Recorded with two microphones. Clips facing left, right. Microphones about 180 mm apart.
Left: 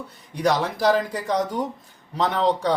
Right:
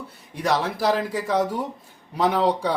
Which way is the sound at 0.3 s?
5° right (ahead or behind).